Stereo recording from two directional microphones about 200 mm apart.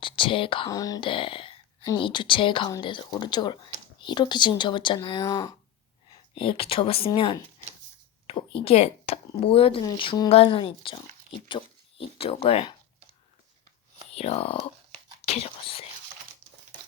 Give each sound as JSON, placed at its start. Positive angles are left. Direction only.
{"t": 0.0, "sound": "speech", "side_deg": 25}
{"t": 14.2, "sound": "speech", "side_deg": 30}